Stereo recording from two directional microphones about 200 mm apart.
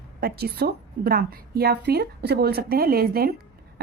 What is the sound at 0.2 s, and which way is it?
A woman's voice, 50° right (ahead or behind).